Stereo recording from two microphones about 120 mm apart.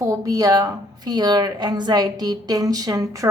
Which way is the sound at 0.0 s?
30° right (ahead or behind).